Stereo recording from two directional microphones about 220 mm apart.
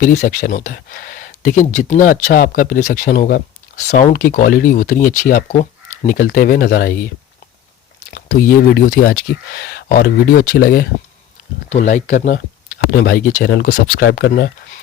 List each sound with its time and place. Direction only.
0.0 s speech: 40° left (ahead or behind)
8.1 s speech: 40° left (ahead or behind)